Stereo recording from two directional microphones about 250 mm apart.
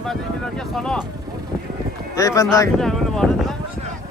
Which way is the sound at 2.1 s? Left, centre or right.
Centre.